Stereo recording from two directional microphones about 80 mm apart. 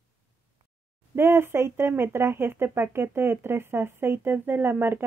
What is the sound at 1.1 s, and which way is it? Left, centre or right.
Speech, right.